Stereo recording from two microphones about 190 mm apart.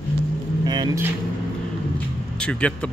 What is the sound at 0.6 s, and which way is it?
Vehicle, 20° right (ahead or behind).